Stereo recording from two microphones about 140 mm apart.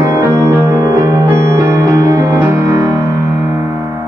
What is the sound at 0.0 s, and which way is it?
Music, 30° right (ahead or behind).